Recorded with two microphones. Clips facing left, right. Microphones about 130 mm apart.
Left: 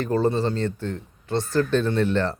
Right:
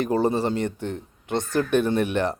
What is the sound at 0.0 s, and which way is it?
A man's voice, 15° right (ahead or behind).